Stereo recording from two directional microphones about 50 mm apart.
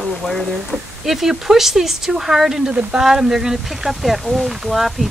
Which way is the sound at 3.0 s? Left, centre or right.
Centre.